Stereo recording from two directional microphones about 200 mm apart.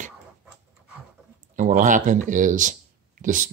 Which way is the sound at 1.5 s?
40° right (ahead or behind).